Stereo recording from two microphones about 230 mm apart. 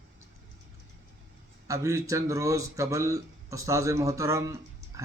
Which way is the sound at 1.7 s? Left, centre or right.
Centre.